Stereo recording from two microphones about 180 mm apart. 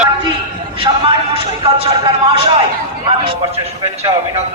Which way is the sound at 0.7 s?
30° right (ahead or behind).